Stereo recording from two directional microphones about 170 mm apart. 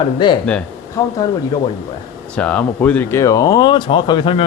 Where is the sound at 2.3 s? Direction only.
5° left (ahead or behind).